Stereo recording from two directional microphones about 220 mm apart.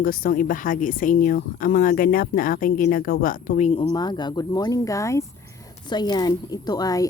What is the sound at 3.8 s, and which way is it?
Speech, 20° left (ahead or behind).